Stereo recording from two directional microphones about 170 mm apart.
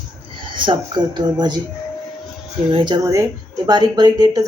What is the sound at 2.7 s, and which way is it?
Speech, 25° right (ahead or behind).